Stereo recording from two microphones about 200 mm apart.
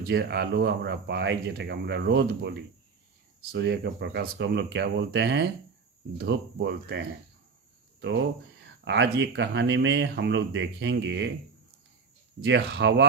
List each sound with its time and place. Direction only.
0.0 s speech: 55° right (ahead or behind)
12.4 s speech: 55° right (ahead or behind)